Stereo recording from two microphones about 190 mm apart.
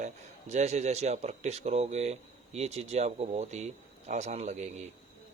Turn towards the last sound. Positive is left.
turn(degrees=-40)  # may be behind; listen again after turning